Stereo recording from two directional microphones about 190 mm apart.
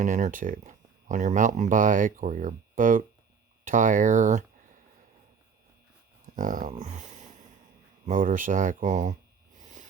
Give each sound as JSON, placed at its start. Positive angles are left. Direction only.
{"t": 0.0, "sound": "speech", "side_deg": -40}
{"t": 6.2, "sound": "speech", "side_deg": -45}
{"t": 9.6, "sound": "a sound", "side_deg": -40}